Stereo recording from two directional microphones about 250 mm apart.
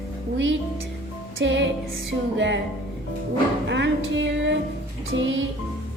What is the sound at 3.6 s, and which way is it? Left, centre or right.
Music, right.